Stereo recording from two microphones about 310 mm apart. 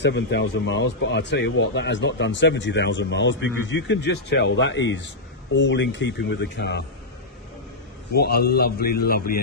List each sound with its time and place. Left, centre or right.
0.0 s speech: left
8.1 s a man's voice: left